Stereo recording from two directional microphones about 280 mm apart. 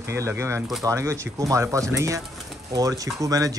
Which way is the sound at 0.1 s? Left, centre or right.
Centre.